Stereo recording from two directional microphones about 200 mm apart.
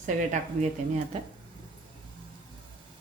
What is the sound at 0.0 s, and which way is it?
Speech, 40° right (ahead or behind).